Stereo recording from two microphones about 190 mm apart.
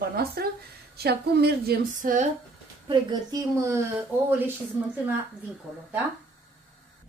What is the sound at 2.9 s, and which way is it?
Speech, 20° right (ahead or behind).